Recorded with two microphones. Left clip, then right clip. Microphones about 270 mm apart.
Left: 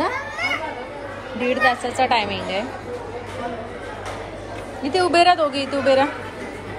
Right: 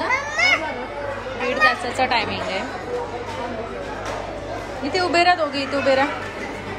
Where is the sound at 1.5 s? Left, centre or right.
Centre.